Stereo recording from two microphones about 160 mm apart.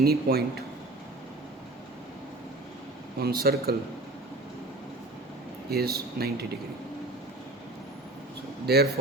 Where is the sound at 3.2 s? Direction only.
75° right (ahead or behind).